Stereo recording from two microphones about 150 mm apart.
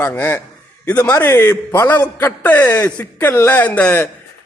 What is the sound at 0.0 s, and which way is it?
A man's voice, 15° left (ahead or behind).